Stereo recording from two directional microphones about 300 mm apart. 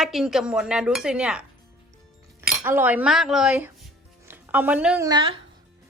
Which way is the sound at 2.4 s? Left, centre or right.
Centre.